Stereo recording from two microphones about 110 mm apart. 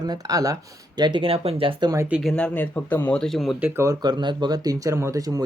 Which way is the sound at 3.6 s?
25° right (ahead or behind).